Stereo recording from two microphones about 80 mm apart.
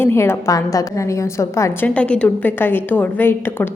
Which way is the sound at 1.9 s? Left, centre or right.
Centre.